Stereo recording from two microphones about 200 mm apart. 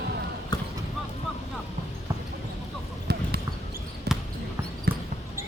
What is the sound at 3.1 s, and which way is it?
Basketball bounce, 55° right (ahead or behind).